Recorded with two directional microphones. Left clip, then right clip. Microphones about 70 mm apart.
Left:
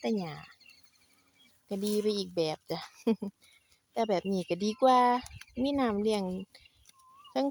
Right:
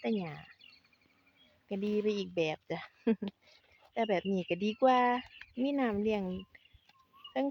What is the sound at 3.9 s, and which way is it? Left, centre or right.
Speech, left.